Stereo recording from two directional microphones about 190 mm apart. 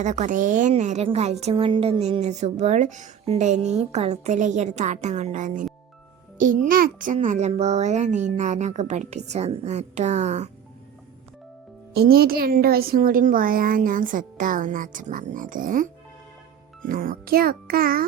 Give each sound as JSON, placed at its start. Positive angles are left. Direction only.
{"t": 0.0, "sound": "a woman's voice", "side_deg": -40}
{"t": 11.9, "sound": "a woman's voice", "side_deg": -55}